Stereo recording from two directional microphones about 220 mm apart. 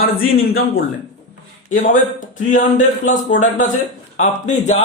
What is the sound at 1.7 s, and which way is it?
Speech, 35° left (ahead or behind).